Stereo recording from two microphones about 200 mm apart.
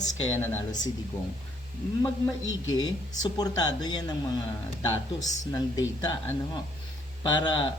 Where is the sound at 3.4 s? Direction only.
20° left (ahead or behind).